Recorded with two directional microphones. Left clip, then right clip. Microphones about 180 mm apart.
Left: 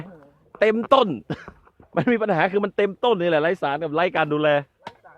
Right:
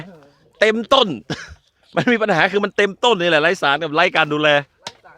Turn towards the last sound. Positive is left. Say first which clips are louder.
# right 4 dB
turn(degrees=-25)  # may be behind; listen again after turning